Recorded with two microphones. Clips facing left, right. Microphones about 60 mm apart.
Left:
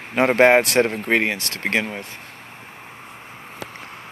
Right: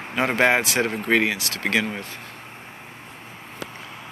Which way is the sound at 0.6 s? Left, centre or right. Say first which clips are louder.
Left 5 dB; left.